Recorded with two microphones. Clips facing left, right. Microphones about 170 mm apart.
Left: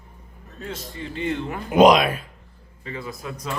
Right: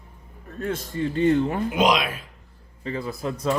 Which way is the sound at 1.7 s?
50° left (ahead or behind).